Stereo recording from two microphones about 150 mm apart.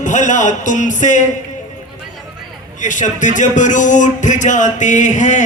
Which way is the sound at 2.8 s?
55° left (ahead or behind).